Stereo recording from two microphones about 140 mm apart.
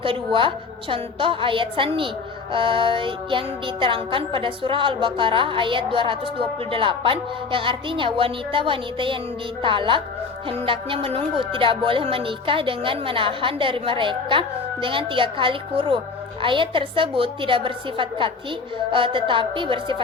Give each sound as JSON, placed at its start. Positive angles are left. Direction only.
{"t": 0.0, "sound": "music", "side_deg": -40}